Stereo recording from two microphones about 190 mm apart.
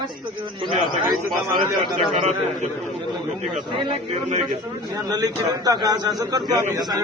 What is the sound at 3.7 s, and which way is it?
Speech, 25° right (ahead or behind).